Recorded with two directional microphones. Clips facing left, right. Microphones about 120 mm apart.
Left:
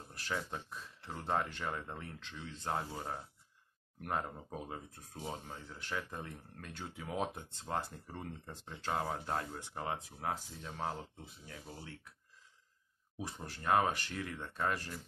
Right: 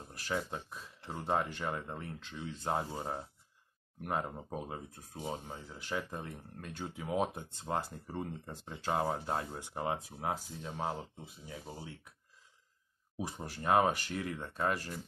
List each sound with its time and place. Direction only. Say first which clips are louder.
0.1 s speech: right 3 dB; 10° right (ahead or behind)
2.7 s speech: right 3 dB; 20° right (ahead or behind)
4.0 s speech: right 2 dB; 10° right (ahead or behind)
7.6 s speech: right 2 dB; 15° right (ahead or behind)
13.2 s speech: right 3 dB; 15° right (ahead or behind)